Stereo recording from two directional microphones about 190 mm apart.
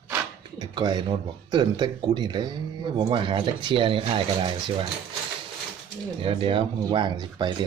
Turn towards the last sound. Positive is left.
turn(degrees=-25)  # may be behind; listen again after turning